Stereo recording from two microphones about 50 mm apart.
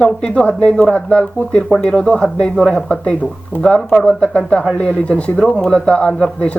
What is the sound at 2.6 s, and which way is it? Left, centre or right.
Speech, centre.